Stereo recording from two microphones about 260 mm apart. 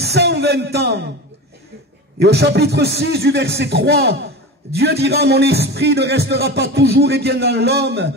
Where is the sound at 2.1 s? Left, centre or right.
Right.